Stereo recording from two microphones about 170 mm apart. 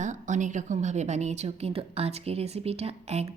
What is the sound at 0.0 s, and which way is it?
A woman's voice, 45° right (ahead or behind).